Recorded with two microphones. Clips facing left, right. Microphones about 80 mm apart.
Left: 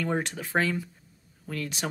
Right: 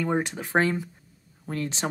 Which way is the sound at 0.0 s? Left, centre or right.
Centre.